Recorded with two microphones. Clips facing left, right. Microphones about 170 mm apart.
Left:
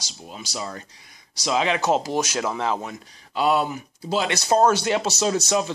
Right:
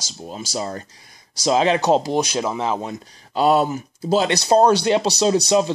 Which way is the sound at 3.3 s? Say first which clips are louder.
Right 4 dB; 40° right (ahead or behind).